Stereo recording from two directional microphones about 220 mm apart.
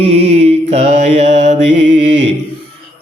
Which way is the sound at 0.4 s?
30° right (ahead or behind).